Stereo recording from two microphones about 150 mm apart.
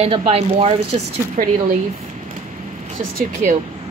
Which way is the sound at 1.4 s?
60° right (ahead or behind).